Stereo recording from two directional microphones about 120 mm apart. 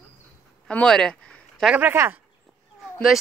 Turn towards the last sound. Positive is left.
turn(degrees=0)  # may be behind; listen again after turning